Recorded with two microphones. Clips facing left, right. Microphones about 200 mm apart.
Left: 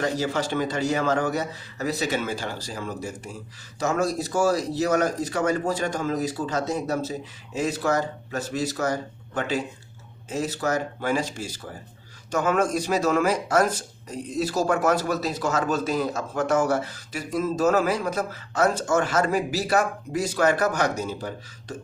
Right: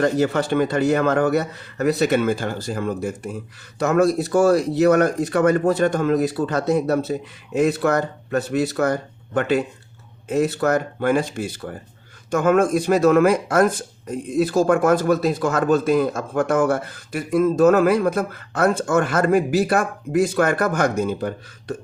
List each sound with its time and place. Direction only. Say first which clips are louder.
0.0 s speech: right 6 dB; 60° right (ahead or behind)